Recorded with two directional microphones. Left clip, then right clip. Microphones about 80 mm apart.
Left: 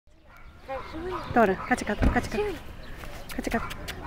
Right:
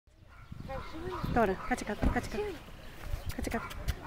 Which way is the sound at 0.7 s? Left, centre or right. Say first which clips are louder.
Left 7 dB; centre.